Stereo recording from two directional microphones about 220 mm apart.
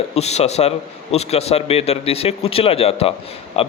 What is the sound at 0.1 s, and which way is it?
A man's voice, 30° left (ahead or behind).